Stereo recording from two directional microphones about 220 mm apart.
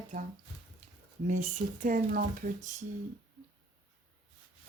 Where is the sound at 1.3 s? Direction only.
35° right (ahead or behind).